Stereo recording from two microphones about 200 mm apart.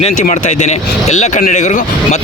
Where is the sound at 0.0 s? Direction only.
40° left (ahead or behind).